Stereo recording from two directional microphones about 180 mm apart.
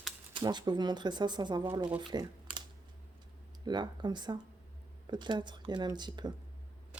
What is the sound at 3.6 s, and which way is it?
Speech, 25° right (ahead or behind).